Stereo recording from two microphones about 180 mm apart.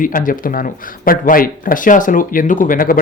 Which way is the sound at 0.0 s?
50° left (ahead or behind).